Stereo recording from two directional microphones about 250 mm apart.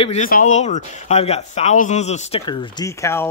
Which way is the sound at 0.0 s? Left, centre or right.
Left.